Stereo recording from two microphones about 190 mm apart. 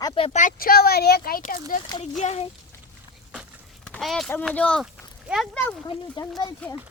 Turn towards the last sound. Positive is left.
turn(degrees=5)  # may be behind; listen again after turning